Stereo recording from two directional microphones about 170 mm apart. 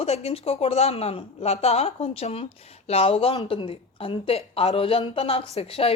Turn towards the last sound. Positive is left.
turn(degrees=35)  # may be behind; listen again after turning